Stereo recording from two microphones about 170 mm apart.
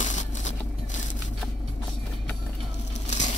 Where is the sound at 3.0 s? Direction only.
45° left (ahead or behind).